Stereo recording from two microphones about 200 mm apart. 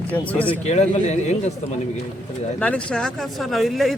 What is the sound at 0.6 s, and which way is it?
Speech, 35° left (ahead or behind).